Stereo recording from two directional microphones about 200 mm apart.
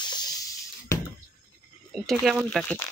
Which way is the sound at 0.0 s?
20° left (ahead or behind).